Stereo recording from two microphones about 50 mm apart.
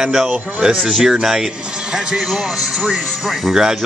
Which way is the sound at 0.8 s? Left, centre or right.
Centre.